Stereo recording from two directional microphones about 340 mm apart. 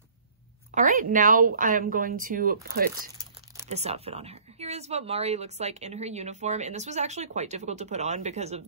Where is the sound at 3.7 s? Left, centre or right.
Centre.